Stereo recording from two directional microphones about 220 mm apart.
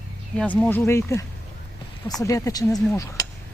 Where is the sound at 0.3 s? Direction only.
5° left (ahead or behind).